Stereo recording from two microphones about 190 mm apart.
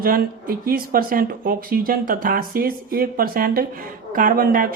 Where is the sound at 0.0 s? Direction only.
50° right (ahead or behind).